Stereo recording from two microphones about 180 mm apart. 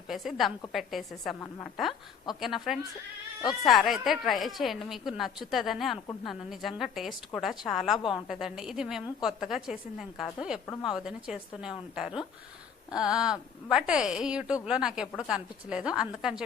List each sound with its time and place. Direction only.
0.1 s speech: centre (ahead or behind)